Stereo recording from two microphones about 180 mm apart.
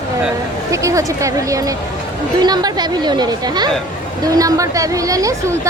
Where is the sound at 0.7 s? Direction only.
15° right (ahead or behind).